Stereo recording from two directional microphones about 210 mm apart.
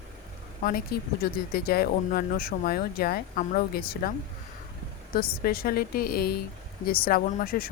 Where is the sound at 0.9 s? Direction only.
50° left (ahead or behind).